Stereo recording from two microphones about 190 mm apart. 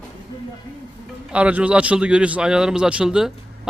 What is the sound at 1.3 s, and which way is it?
A man's voice, 5° right (ahead or behind).